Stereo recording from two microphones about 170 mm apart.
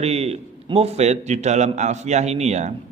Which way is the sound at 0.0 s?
40° right (ahead or behind).